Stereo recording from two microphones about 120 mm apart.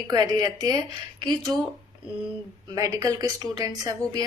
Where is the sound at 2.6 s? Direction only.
30° right (ahead or behind).